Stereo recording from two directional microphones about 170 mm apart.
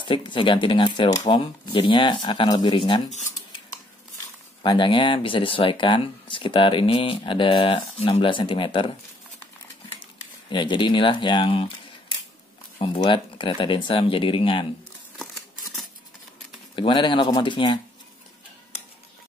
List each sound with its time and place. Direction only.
0.0 s speech: 25° left (ahead or behind)
4.6 s speech: 30° left (ahead or behind)
10.5 s speech: 25° left (ahead or behind)
16.7 s speech: 30° left (ahead or behind)